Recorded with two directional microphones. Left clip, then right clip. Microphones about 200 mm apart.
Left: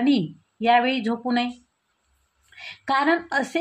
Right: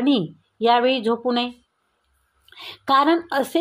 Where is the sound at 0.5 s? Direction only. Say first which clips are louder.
Right 2 dB; 25° right (ahead or behind).